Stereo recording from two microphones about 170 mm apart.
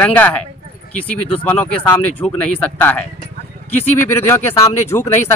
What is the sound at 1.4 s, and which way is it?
A man's voice, 10° left (ahead or behind).